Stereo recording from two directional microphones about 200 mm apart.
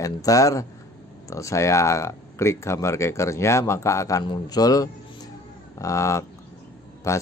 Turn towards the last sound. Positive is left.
turn(degrees=15)  # may be behind; listen again after turning